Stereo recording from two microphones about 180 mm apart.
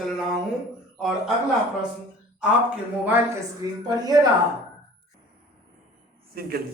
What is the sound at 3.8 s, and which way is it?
Speech, 20° right (ahead or behind).